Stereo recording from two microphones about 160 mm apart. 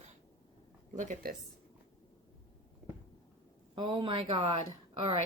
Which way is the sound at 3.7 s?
30° right (ahead or behind).